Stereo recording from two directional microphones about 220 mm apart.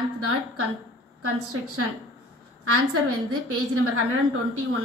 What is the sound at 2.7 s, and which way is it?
A woman's voice, 85° right.